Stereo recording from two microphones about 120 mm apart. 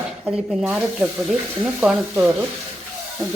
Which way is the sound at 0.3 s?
5° right (ahead or behind).